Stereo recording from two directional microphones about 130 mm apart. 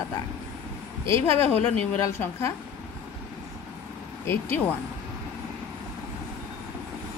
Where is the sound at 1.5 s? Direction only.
15° left (ahead or behind).